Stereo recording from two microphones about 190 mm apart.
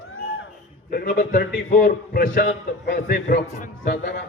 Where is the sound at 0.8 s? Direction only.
50° left (ahead or behind).